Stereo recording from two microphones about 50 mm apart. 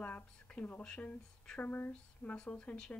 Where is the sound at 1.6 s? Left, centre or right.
Left.